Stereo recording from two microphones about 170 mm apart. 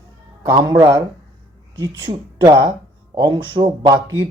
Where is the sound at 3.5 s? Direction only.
25° right (ahead or behind).